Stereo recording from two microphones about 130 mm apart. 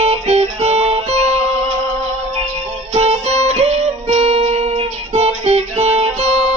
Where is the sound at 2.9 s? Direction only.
55° right (ahead or behind).